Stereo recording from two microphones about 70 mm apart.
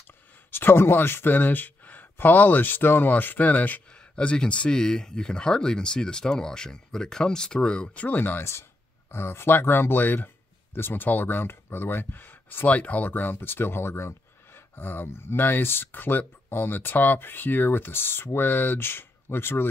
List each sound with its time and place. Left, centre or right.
0.5 s speech: left